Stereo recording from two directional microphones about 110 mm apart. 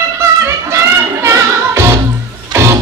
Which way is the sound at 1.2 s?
25° right (ahead or behind).